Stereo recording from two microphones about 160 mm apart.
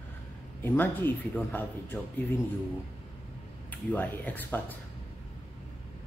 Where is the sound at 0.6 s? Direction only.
10° left (ahead or behind).